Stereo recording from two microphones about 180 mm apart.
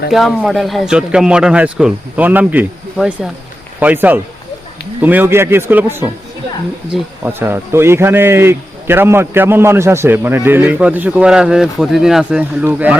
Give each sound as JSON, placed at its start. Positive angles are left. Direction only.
{"t": 0.1, "sound": "a man's voice", "side_deg": 0}